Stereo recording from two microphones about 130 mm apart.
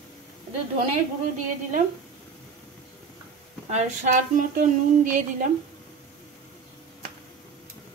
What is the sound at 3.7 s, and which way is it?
Speech, 70° right (ahead or behind).